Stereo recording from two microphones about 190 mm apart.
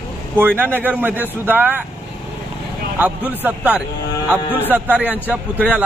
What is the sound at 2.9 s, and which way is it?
A man's voice, 10° right (ahead or behind).